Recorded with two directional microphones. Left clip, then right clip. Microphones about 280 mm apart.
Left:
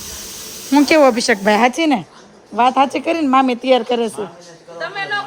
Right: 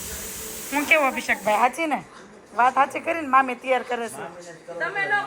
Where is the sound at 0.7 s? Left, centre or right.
Left.